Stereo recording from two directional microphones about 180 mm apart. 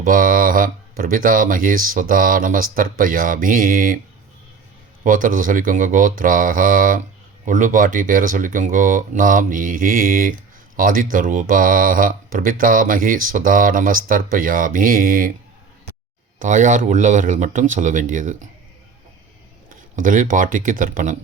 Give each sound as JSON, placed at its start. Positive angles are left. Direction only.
{"t": 0.0, "sound": "speech", "side_deg": -50}
{"t": 5.0, "sound": "speech", "side_deg": -50}
{"t": 16.4, "sound": "speech", "side_deg": -45}
{"t": 20.0, "sound": "speech", "side_deg": -45}